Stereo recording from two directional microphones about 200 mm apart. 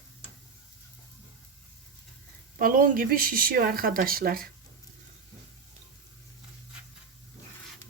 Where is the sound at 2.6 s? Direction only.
45° right (ahead or behind).